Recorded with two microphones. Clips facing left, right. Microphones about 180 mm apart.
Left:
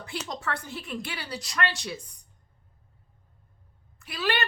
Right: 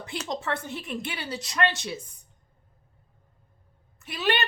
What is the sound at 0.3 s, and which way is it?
A woman's voice, 20° right (ahead or behind).